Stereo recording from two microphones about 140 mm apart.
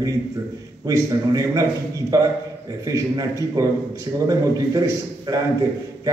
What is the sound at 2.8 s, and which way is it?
A man's voice, 25° right (ahead or behind).